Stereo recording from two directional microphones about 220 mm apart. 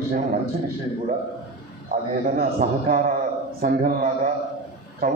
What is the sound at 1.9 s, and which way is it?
A man's voice, 40° right (ahead or behind).